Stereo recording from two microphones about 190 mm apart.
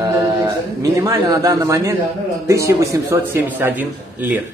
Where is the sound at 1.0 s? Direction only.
20° right (ahead or behind).